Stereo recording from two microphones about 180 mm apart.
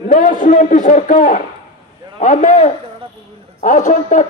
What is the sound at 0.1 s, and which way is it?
Speech, 45° left (ahead or behind).